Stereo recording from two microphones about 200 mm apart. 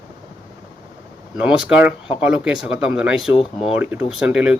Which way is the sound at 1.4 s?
5° right (ahead or behind).